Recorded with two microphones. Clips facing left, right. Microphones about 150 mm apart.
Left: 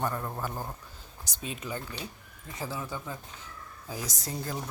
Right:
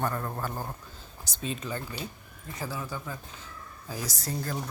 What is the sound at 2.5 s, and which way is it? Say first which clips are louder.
Speech: even; 25° left (ahead or behind).